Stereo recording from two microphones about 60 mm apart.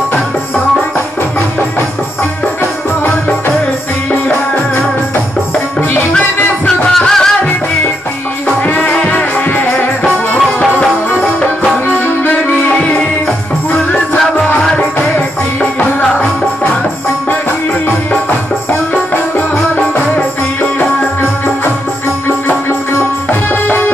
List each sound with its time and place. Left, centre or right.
7.1 s music: centre
8.6 s music: left
14.7 s music: left
22.5 s music: left